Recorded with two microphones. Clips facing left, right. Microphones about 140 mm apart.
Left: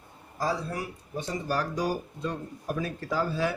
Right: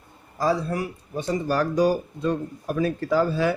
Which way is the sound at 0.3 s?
80° right.